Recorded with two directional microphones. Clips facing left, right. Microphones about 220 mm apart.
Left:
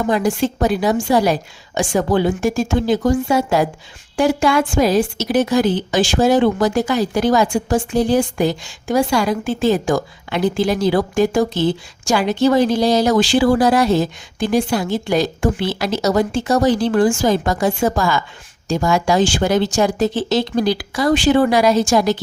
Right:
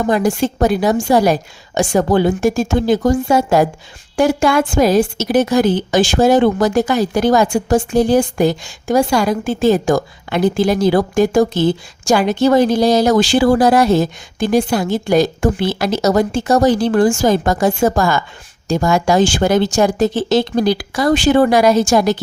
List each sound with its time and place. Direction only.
0.1 s a woman's voice: 45° right (ahead or behind)